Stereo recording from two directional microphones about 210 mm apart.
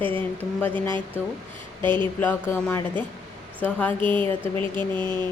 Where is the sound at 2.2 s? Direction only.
10° left (ahead or behind).